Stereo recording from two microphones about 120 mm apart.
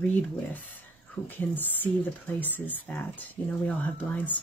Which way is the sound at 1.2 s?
15° left (ahead or behind).